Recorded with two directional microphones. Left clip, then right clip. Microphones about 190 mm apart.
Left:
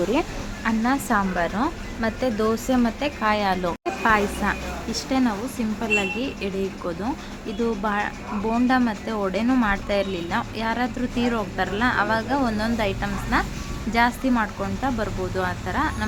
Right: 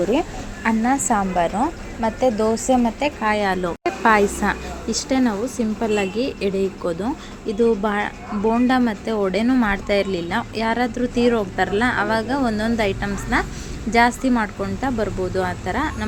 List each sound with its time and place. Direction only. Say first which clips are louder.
0.6 s speech: right 4 dB; 10° right (ahead or behind)
4.0 s speech: right 4 dB; 25° right (ahead or behind)